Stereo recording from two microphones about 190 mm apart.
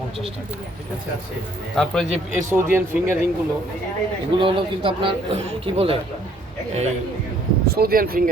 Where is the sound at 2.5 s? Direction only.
10° right (ahead or behind).